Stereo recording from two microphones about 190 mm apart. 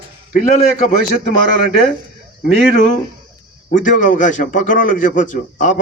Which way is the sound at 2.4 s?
40° left (ahead or behind).